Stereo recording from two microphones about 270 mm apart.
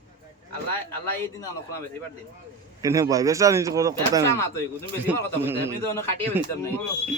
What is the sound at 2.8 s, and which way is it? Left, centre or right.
Speech, centre.